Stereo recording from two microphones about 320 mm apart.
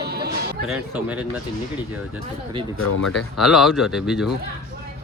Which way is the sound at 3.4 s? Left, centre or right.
Centre.